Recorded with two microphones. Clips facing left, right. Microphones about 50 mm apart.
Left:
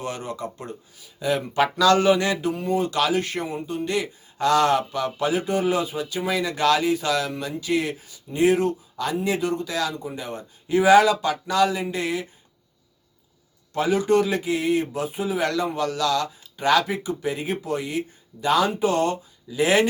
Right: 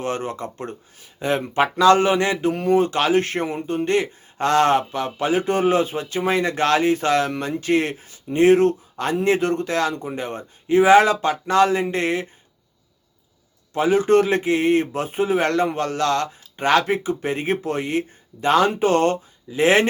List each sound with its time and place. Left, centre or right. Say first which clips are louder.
0.0 s speech: right 4 dB; right
2.5 s speech: right 5 dB; right
13.7 s speech: right 4 dB; right